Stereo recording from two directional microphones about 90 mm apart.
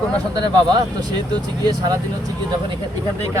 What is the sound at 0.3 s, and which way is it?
Speech, 50° right (ahead or behind).